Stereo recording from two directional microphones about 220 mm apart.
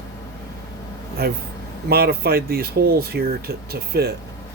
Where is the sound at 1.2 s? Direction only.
45° right (ahead or behind).